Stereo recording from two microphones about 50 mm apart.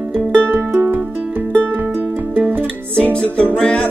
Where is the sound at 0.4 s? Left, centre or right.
Right.